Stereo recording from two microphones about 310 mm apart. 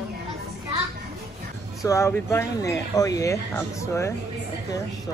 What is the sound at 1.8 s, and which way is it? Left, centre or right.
Speech, centre.